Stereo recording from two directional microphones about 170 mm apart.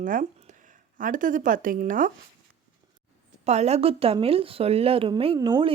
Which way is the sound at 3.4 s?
40° right (ahead or behind).